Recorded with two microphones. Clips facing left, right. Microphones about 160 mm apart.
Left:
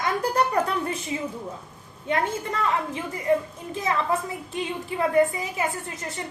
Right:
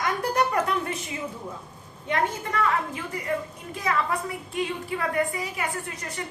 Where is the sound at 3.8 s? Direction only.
25° left (ahead or behind).